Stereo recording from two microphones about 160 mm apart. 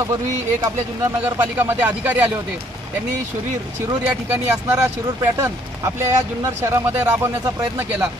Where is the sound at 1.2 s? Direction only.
15° right (ahead or behind).